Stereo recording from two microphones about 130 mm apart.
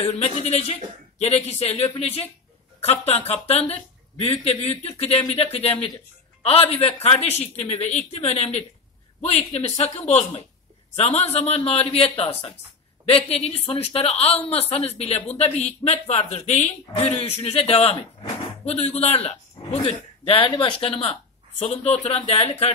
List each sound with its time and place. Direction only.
0.1 s a woman's voice: 55° left (ahead or behind)